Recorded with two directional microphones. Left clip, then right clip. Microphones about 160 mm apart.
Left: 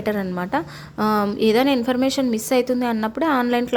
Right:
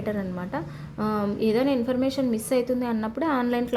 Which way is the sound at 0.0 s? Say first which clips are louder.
Left 6 dB; 25° left (ahead or behind).